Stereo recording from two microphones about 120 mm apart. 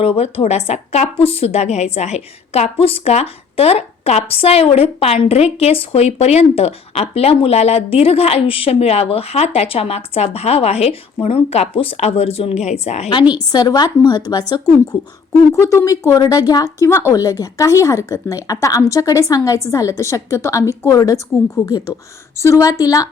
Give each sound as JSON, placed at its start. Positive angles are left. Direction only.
{"t": 0.0, "sound": "a woman's voice", "side_deg": 55}
{"t": 13.1, "sound": "a woman's voice", "side_deg": 40}
{"t": 15.5, "sound": "speech", "side_deg": 25}